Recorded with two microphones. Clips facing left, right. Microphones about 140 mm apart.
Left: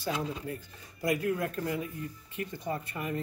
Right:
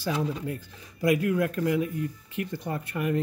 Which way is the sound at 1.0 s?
80° right.